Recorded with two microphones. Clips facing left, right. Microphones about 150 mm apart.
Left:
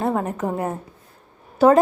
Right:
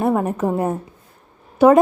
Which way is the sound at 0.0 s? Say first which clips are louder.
Right 4 dB; 15° right (ahead or behind).